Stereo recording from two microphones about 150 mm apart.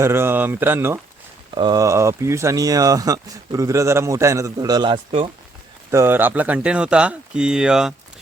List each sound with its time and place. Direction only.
0.0 s speech: 15° right (ahead or behind)
1.5 s speech: 25° right (ahead or behind)
5.9 s speech: 15° right (ahead or behind)